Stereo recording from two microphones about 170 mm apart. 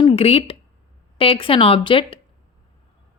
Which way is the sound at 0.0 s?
35° left (ahead or behind).